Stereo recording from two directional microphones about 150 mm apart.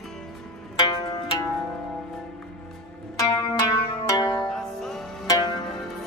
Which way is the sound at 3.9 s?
30° left (ahead or behind).